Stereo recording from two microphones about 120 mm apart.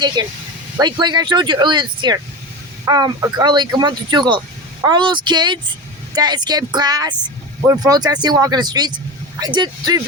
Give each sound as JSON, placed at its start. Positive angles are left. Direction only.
{"t": 0.2, "sound": "speech", "side_deg": -35}